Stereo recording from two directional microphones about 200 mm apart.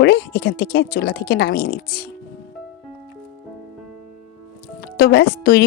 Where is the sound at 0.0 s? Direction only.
55° left (ahead or behind).